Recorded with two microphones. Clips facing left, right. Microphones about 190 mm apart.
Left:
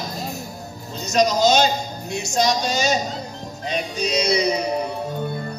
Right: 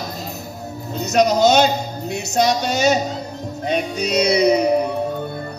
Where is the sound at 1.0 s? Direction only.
60° right (ahead or behind).